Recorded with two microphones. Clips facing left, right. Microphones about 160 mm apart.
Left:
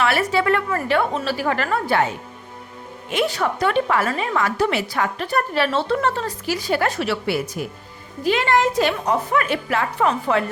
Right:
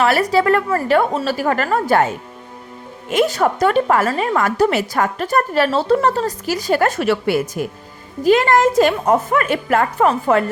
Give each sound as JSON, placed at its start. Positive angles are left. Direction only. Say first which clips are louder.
{"t": 0.0, "sound": "a woman's voice", "louder": "right 4 dB", "side_deg": -40}
{"t": 3.1, "sound": "a woman's voice", "louder": "right 5 dB", "side_deg": -45}